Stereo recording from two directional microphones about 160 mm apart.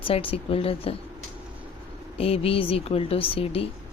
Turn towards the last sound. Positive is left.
turn(degrees=35)  # may be behind; listen again after turning